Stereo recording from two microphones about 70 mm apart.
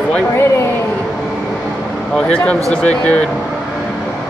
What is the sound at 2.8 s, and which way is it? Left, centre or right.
Speech, centre.